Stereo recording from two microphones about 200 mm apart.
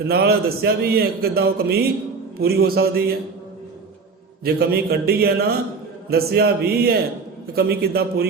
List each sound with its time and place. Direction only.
0.1 s a man's voice: 50° right (ahead or behind)
4.4 s a man's voice: 50° right (ahead or behind)